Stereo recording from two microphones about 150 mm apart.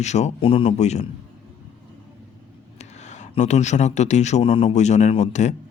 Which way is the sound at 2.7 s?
50° left (ahead or behind).